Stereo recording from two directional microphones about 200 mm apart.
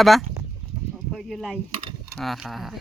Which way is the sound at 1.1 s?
Centre (ahead or behind).